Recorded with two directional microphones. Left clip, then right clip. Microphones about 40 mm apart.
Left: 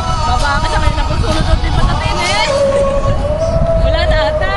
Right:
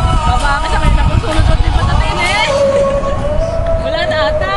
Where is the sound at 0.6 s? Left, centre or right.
Centre.